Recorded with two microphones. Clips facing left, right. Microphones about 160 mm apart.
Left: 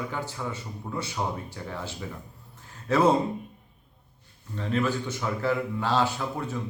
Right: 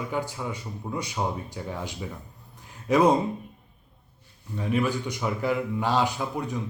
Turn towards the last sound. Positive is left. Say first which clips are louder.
# right 1 dB
turn(degrees=-15)  # may be behind; listen again after turning